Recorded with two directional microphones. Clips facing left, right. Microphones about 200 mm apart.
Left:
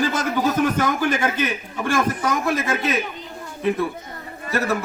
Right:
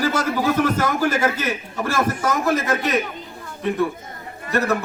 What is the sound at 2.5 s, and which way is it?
Speech, centre (ahead or behind).